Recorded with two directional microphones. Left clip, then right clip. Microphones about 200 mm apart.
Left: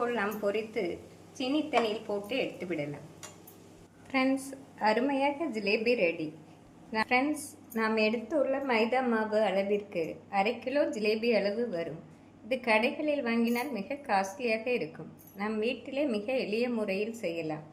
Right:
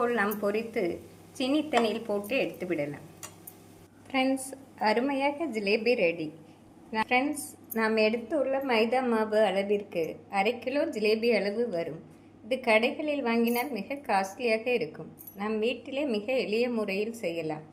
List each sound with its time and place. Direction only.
0.0 s a woman's voice: 20° right (ahead or behind)
4.1 s a woman's voice: 10° right (ahead or behind)